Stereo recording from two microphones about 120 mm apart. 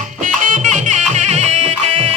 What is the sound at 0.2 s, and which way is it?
Music, 90° right.